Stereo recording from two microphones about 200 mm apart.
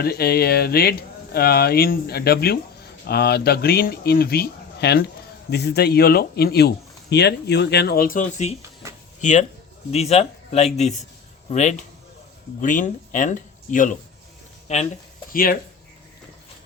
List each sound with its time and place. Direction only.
0.0 s speech: 50° left (ahead or behind)
8.8 s a sound: 15° right (ahead or behind)
9.2 s speech: 40° left (ahead or behind)
15.3 s speech: 45° left (ahead or behind)